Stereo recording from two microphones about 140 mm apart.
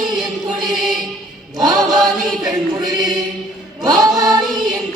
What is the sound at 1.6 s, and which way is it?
Chant, 25° right (ahead or behind).